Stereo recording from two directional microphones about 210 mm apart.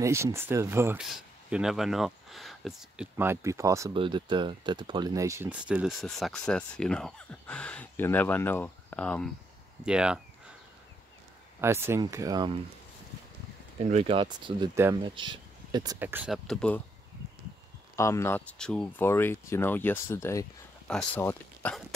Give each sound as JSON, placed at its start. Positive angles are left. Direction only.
{"t": 0.0, "sound": "speech", "side_deg": -10}
{"t": 11.6, "sound": "speech", "side_deg": -10}
{"t": 13.8, "sound": "speech", "side_deg": -30}
{"t": 17.9, "sound": "speech", "side_deg": 15}